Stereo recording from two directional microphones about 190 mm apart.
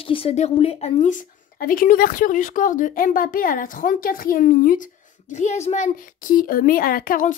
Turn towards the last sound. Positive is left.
turn(degrees=45)  # may be behind; listen again after turning